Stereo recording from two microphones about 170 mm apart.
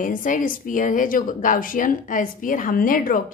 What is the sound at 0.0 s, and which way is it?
A woman's voice, 50° left (ahead or behind).